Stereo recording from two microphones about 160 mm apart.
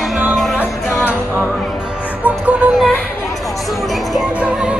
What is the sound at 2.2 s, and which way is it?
Speech, 10° right (ahead or behind).